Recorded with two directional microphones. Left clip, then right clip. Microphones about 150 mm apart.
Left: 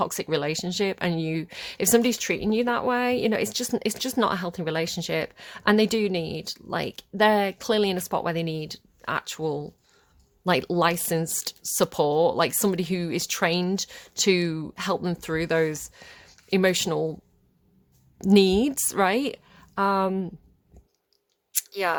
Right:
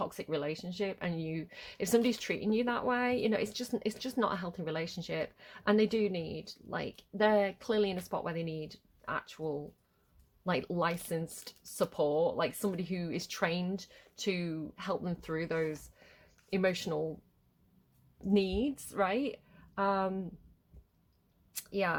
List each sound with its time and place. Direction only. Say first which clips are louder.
0.0 s speech: left 10 dB; 60° left (ahead or behind)
18.2 s a woman's voice: left 12 dB; 60° left (ahead or behind); by 20.2 s 45° left (ahead or behind)
21.5 s chewing: left 7 dB; 50° left (ahead or behind)